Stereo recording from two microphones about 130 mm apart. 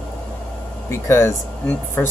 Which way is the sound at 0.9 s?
20° left (ahead or behind).